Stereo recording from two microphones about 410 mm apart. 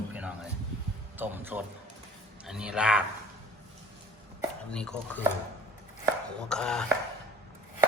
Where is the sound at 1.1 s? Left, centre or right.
Centre.